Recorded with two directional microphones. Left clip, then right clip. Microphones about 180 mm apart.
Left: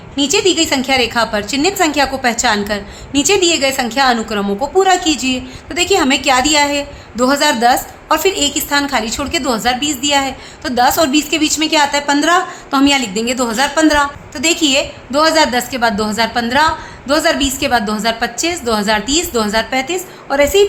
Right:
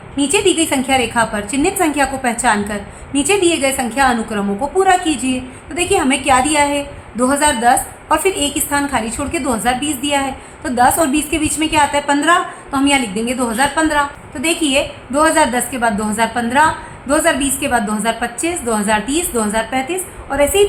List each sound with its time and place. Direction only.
0.2 s a woman's voice: 40° left (ahead or behind)